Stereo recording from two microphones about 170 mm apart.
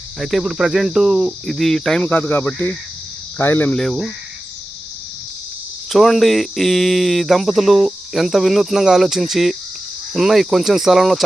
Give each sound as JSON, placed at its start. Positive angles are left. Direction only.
{"t": 0.2, "sound": "speech", "side_deg": 0}
{"t": 5.9, "sound": "speech", "side_deg": 0}